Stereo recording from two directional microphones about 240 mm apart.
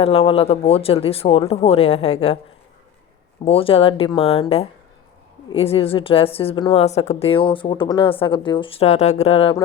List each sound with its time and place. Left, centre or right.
0.0 s a woman's voice: left
3.4 s a woman's voice: left